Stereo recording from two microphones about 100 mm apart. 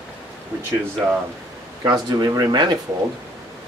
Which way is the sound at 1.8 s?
40° right (ahead or behind).